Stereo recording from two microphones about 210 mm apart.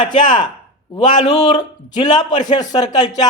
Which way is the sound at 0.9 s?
20° left (ahead or behind).